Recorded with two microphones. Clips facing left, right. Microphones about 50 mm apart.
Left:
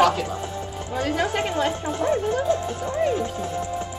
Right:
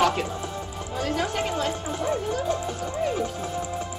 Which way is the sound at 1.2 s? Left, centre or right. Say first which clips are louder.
Left 4 dB; centre.